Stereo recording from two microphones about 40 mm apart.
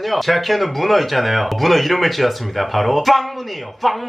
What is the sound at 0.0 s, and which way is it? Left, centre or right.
Speech, centre.